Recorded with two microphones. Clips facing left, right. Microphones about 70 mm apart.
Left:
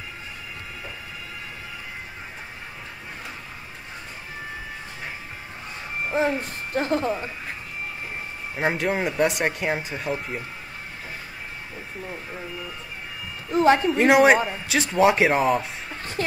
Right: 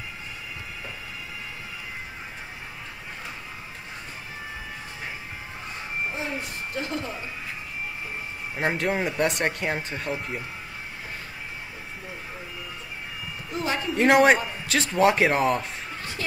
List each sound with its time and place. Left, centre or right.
6.1 s speech: left
8.5 s speech: centre
13.5 s speech: left
13.9 s speech: centre
16.2 s speech: left